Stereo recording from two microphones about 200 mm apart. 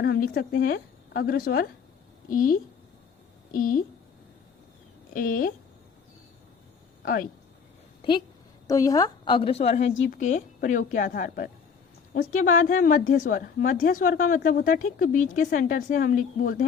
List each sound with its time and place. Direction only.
0.0 s a woman's voice: 50° left (ahead or behind)
5.1 s a woman's voice: 45° left (ahead or behind)
7.0 s speech: 45° left (ahead or behind)
8.6 s a woman's voice: 15° left (ahead or behind); by 16.6 s 45° left (ahead or behind)